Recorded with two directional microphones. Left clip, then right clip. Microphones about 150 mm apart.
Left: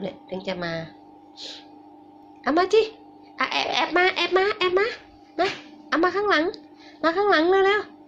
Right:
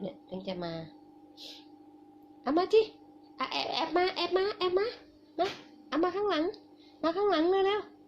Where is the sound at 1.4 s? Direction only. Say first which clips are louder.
Left 10 dB; 20° right (ahead or behind).